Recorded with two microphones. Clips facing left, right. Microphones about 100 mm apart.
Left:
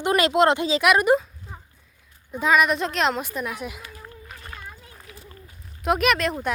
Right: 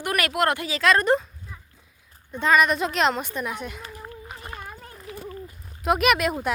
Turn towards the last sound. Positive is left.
turn(degrees=-5)  # may be behind; listen again after turning